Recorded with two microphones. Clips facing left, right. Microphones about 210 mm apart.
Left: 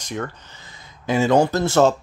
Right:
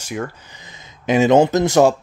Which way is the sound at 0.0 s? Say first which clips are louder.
Right 2 dB; 10° right (ahead or behind).